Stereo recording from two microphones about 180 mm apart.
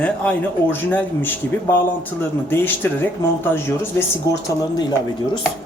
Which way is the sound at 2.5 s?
10° left (ahead or behind).